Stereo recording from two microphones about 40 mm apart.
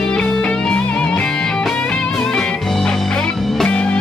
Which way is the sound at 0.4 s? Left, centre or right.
Left.